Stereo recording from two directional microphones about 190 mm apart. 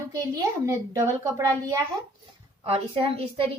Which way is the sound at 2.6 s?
30° right (ahead or behind).